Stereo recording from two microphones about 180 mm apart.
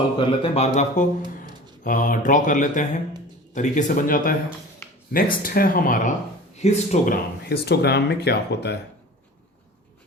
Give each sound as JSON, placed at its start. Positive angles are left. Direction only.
{"t": 0.2, "sound": "speech", "side_deg": 35}
{"t": 6.6, "sound": "speech", "side_deg": 40}